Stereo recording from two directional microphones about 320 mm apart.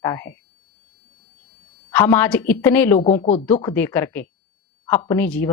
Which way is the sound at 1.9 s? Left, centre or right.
Centre.